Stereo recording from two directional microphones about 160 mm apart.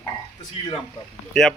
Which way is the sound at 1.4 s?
5° left (ahead or behind).